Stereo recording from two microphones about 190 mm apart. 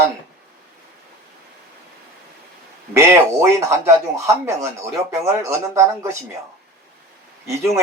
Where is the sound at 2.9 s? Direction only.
15° right (ahead or behind).